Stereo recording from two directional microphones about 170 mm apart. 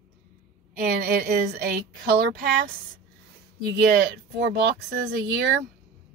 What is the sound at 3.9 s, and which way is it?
Speech, 70° right (ahead or behind).